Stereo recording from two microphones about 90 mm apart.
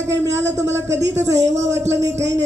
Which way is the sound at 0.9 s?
30° right (ahead or behind).